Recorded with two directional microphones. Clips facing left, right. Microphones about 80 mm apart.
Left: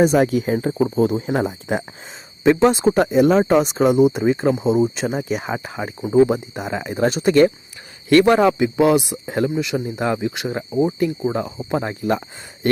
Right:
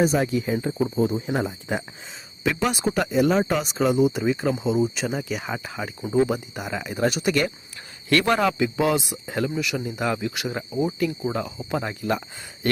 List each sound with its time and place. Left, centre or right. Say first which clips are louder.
0.2 s speech: left 6 dB; left
2.4 s speech: left 9 dB; left
3.8 s speech: left 3 dB; left
4.2 s speech: left 5 dB; left
4.6 s speech: left 5 dB; left
8.1 s speech: left 7 dB; centre